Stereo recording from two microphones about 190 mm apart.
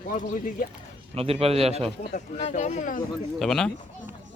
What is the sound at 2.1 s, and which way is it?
Speech, 35° left (ahead or behind).